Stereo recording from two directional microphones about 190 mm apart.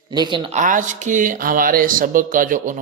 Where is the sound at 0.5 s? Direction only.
40° right (ahead or behind).